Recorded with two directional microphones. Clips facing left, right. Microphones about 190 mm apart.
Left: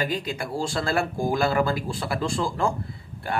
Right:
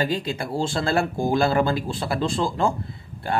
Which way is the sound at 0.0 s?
30° right (ahead or behind).